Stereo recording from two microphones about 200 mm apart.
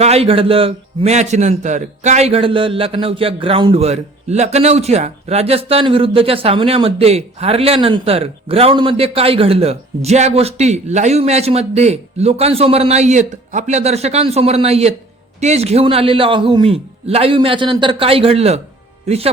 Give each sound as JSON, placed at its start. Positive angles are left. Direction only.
{"t": 0.0, "sound": "a man's voice", "side_deg": -30}